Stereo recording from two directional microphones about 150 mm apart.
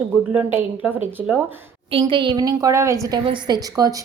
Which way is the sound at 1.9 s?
35° right (ahead or behind).